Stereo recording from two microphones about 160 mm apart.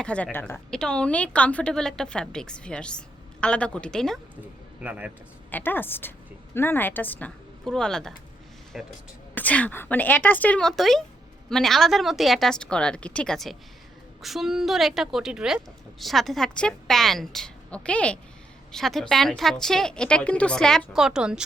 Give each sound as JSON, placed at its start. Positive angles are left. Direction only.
{"t": 0.0, "sound": "a woman's voice", "side_deg": 10}
{"t": 4.8, "sound": "a man's voice", "side_deg": -10}
{"t": 5.5, "sound": "a woman's voice", "side_deg": 10}
{"t": 9.3, "sound": "a woman's voice", "side_deg": 10}